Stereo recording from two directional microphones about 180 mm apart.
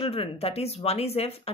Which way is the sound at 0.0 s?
30° left (ahead or behind).